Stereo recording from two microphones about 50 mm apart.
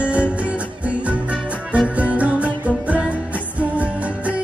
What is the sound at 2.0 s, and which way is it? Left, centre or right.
Music, right.